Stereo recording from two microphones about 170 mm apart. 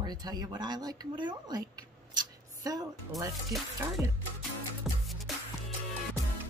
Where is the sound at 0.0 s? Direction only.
25° right (ahead or behind).